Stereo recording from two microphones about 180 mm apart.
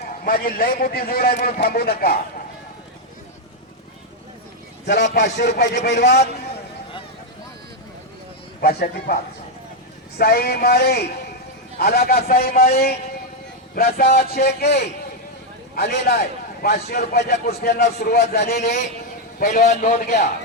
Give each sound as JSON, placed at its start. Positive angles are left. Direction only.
{"t": 0.0, "sound": "a man's voice", "side_deg": 55}
{"t": 5.2, "sound": "a man's voice", "side_deg": 75}
{"t": 8.6, "sound": "a man's voice", "side_deg": 55}
{"t": 10.2, "sound": "a man's voice", "side_deg": 60}
{"t": 18.6, "sound": "a man's voice", "side_deg": 40}